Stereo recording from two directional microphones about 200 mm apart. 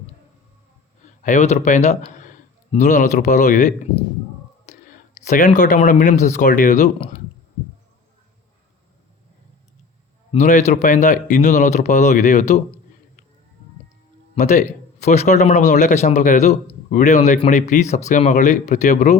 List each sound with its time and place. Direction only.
1.2 s speech: 35° left (ahead or behind)
2.0 s a sound: 40° left (ahead or behind)
2.7 s speech: 40° left (ahead or behind)
10.3 s speech: 35° left (ahead or behind)
14.3 s speech: 35° left (ahead or behind)